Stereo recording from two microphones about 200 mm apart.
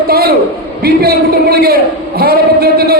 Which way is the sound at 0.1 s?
50° right (ahead or behind).